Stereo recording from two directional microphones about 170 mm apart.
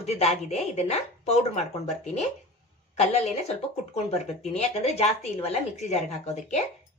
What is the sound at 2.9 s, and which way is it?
A woman's voice, 40° left (ahead or behind).